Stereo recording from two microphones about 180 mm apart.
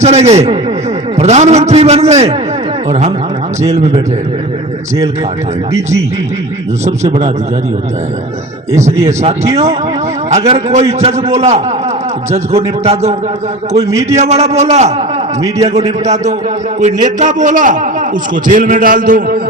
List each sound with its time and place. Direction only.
0.0 s a man's voice: 40° right (ahead or behind)
3.6 s a man's voice: 40° right (ahead or behind)
6.8 s a man's voice: 40° right (ahead or behind)
8.7 s a man's voice: 40° right (ahead or behind)
10.3 s a man's voice: 35° right (ahead or behind)
13.8 s a man's voice: 15° right (ahead or behind)
14.2 s a man's voice: 40° right (ahead or behind)